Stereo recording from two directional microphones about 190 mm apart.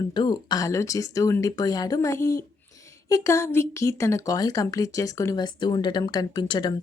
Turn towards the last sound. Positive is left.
turn(degrees=20)  # may be behind; listen again after turning